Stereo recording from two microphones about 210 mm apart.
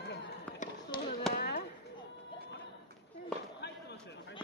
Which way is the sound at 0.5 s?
35° left (ahead or behind).